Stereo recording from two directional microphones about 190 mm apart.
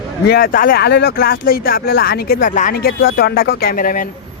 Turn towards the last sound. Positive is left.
turn(degrees=45)  # may be behind; listen again after turning